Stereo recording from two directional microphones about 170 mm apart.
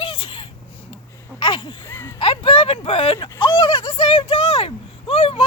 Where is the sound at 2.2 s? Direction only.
30° left (ahead or behind).